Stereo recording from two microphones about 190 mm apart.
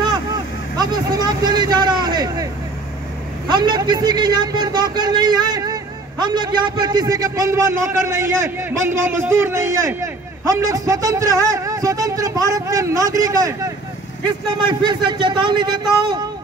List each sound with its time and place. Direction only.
0.7 s a man's voice: 20° right (ahead or behind)
3.4 s a man's voice: 25° right (ahead or behind)
14.7 s a man's voice: 25° right (ahead or behind)